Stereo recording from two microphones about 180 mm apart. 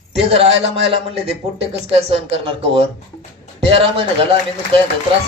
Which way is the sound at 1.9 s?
30° right (ahead or behind).